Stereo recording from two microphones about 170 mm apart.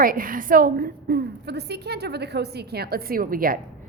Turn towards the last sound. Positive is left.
turn(degrees=-55)  # may be behind; listen again after turning